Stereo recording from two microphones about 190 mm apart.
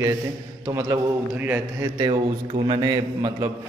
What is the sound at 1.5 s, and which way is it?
A man's voice, 20° right (ahead or behind).